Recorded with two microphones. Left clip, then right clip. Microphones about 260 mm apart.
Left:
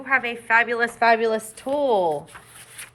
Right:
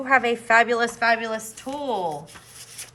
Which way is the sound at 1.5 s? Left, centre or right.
Left.